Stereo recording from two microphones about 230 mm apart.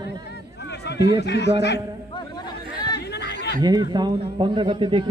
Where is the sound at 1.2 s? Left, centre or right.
Left.